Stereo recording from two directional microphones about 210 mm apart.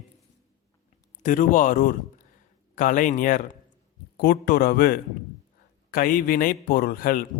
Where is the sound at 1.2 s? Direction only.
40° left (ahead or behind).